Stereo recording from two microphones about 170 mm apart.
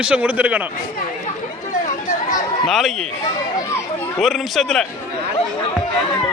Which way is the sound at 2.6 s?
Centre (ahead or behind).